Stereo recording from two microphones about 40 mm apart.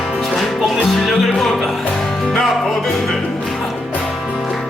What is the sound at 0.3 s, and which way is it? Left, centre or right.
Music, centre.